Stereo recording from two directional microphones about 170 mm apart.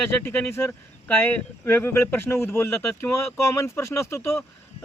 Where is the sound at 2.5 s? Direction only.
5° left (ahead or behind).